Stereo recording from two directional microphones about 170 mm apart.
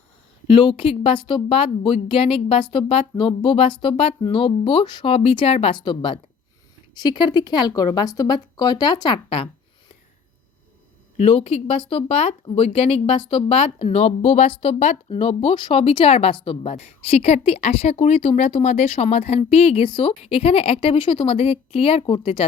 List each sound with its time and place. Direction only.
0.4 s speech: 30° left (ahead or behind)
11.2 s speech: 35° left (ahead or behind)